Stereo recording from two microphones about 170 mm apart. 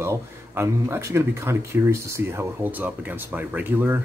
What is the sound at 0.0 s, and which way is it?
Speech, 15° right (ahead or behind).